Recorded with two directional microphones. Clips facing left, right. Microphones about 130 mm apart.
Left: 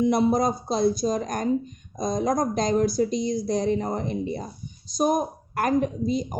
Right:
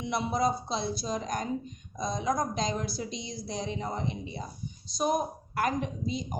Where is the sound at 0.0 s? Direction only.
45° left (ahead or behind).